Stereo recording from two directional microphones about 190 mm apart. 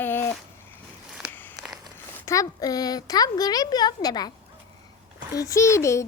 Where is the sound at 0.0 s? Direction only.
10° left (ahead or behind).